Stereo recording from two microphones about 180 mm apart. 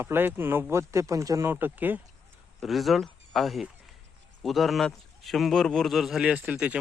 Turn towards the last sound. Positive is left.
turn(degrees=-5)  # may be behind; listen again after turning